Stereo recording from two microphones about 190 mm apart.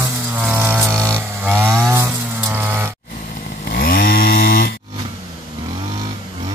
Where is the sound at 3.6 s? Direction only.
50° left (ahead or behind).